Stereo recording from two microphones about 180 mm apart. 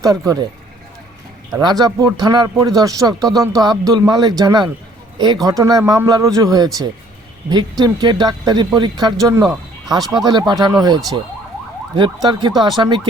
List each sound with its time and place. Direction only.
0.0 s speech: 20° right (ahead or behind)
1.6 s speech: 25° right (ahead or behind)